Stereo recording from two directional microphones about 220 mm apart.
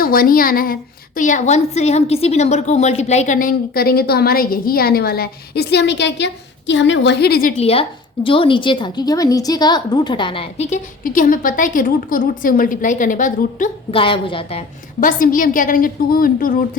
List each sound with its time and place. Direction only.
0.0 s a woman's voice: 40° left (ahead or behind)
7.5 s a woman's voice: 25° left (ahead or behind)
13.9 s a woman's voice: 25° left (ahead or behind)
15.0 s a woman's voice: 40° left (ahead or behind)